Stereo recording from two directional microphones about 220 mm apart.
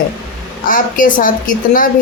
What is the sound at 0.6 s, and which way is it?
Speech, 40° left (ahead or behind).